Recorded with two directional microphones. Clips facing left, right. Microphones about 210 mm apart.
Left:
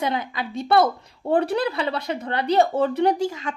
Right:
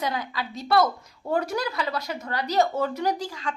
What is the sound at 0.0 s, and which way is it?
Speech, 25° left (ahead or behind).